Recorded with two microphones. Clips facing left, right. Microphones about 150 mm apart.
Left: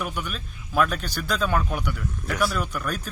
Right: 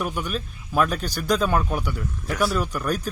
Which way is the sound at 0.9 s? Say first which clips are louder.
Right 5 dB; 40° right (ahead or behind).